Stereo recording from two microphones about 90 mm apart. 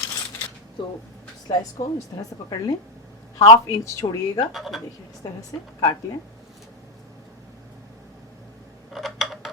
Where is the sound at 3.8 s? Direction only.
35° left (ahead or behind).